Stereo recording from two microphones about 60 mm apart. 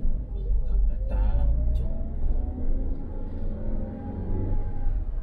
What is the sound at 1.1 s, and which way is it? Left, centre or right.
Music, right.